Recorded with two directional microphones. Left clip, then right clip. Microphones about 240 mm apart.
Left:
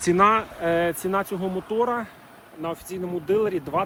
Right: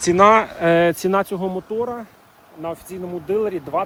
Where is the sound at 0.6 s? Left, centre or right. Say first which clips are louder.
Right 7 dB; right.